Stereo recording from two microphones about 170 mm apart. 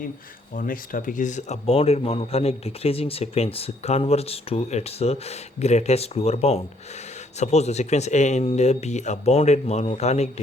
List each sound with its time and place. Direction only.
0.5 s speech: 55° left (ahead or behind)